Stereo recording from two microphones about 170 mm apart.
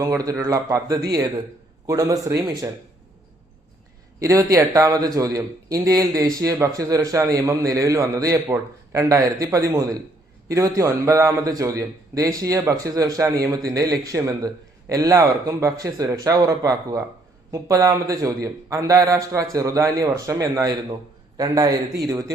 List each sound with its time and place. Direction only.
0.0 s a man's voice: 20° right (ahead or behind)
4.2 s a man's voice: 20° right (ahead or behind)